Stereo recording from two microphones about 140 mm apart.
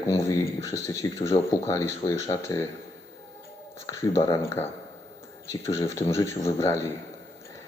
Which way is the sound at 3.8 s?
25° left (ahead or behind).